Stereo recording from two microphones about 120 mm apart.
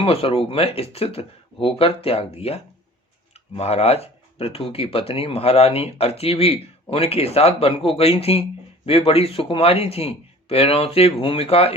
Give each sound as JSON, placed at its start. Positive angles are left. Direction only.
{"t": 0.0, "sound": "a man's voice", "side_deg": 50}